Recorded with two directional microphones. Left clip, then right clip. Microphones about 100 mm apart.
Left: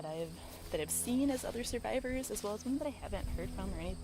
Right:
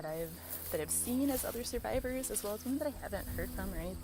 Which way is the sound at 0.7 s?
25° left (ahead or behind).